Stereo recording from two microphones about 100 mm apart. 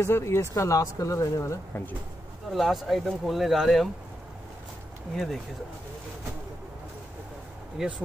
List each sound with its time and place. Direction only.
0.0 s speech: 25° left (ahead or behind)
2.5 s speech: centre (ahead or behind)
5.1 s speech: centre (ahead or behind)
7.8 s speech: 5° right (ahead or behind)